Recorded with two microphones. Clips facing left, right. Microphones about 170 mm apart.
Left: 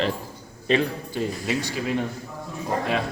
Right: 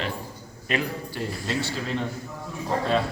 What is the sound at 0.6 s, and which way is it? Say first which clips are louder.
A man's voice: left 5 dB; 25° left (ahead or behind).